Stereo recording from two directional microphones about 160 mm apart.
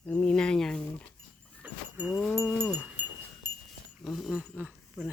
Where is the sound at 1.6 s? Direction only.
10° right (ahead or behind).